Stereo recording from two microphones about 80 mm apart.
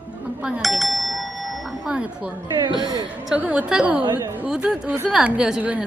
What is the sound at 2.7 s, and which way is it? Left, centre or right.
Speech, left.